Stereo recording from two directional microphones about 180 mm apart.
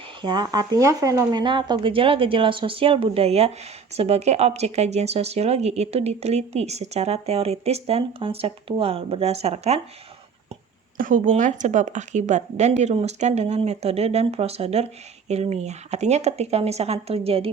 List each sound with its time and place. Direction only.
0.2 s speech: 25° right (ahead or behind)
10.9 s speech: 50° right (ahead or behind); by 17.5 s 30° right (ahead or behind)